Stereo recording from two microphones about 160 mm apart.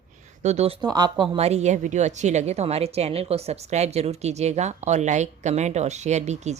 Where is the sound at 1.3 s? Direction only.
40° right (ahead or behind).